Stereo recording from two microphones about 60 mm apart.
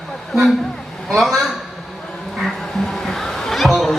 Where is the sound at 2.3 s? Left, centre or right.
Centre.